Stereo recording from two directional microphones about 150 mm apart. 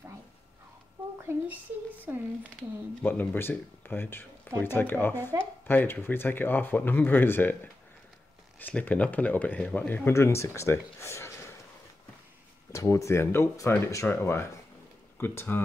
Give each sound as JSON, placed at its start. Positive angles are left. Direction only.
{"t": 1.3, "sound": "a sound", "side_deg": -15}
{"t": 2.1, "sound": "speech", "side_deg": -15}
{"t": 3.0, "sound": "speech", "side_deg": 10}
{"t": 8.5, "sound": "speech", "side_deg": 10}
{"t": 12.7, "sound": "speech", "side_deg": 20}